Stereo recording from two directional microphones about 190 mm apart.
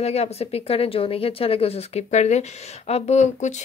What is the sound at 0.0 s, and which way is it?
A woman's voice, 35° left (ahead or behind).